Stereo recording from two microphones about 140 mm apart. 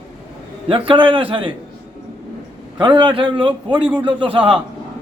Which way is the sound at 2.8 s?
35° right (ahead or behind).